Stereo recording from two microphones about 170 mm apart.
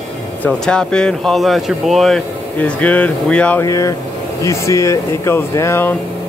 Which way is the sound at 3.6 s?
20° left (ahead or behind).